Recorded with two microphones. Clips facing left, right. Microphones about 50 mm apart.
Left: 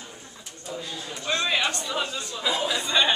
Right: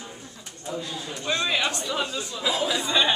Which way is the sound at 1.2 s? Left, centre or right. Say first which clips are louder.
Even; centre.